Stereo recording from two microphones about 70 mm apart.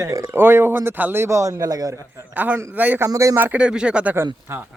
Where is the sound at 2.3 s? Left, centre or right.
Right.